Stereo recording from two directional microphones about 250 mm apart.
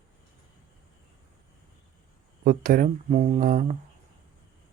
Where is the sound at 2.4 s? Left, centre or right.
Right.